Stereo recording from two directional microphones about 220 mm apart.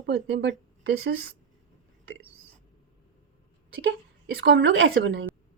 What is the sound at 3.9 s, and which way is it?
Speech, 50° right (ahead or behind).